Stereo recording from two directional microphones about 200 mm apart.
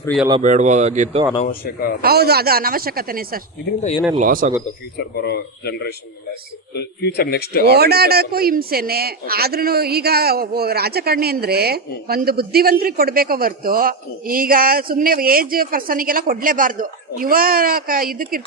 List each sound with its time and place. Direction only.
0.4 s speech: 35° right (ahead or behind)
1.4 s speech: 45° left (ahead or behind)
2.0 s a man's voice: 50° right (ahead or behind)
4.9 s speech: 55° left (ahead or behind)
7.6 s a man's voice: 55° right (ahead or behind)